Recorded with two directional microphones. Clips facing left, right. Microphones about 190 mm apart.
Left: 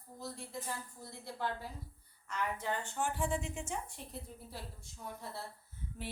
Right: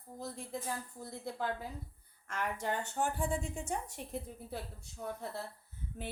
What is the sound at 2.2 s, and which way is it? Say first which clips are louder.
Speech: right 1 dB; 45° right (ahead or behind).